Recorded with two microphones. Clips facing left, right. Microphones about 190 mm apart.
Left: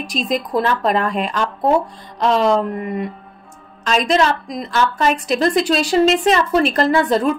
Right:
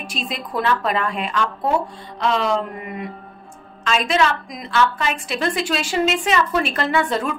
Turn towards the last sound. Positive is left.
turn(degrees=40)  # may be behind; listen again after turning